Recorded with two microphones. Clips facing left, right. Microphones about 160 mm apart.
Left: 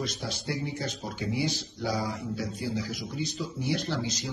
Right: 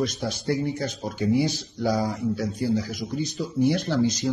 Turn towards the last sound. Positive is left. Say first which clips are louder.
# right 9 dB
turn(degrees=-50)  # may be behind; listen again after turning